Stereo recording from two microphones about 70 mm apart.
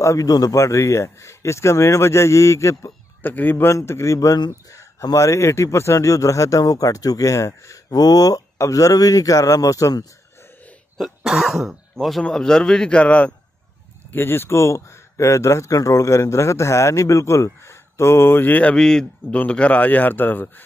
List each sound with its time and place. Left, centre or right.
0.0 s a man's voice: left
0.3 s speech: left
3.2 s a man's voice: left
7.9 s speech: left
8.5 s a man's voice: left
11.0 s speech: centre
12.2 s speech: centre
14.1 s speech: left
18.8 s speech: centre; by 20.6 s left